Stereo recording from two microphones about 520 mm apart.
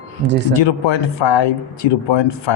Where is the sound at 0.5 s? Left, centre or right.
Left.